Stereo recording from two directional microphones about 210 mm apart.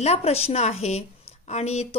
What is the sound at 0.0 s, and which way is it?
A woman's voice, 30° left (ahead or behind).